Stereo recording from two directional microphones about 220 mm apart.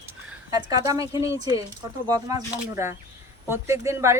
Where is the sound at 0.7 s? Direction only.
15° right (ahead or behind).